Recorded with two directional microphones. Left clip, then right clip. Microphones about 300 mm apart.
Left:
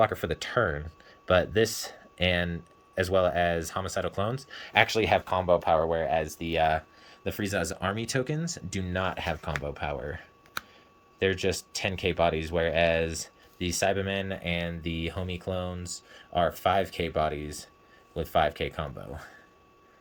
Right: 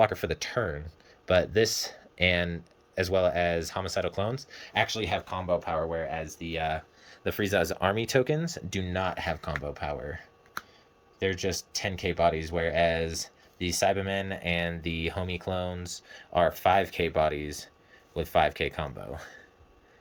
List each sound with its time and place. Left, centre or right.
0.0 s speech: centre
7.1 s speech: centre